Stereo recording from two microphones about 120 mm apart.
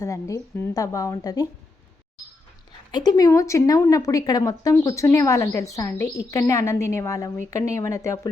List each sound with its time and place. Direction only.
0.0 s a woman's voice: 25° left (ahead or behind)
2.9 s a woman's voice: 35° left (ahead or behind)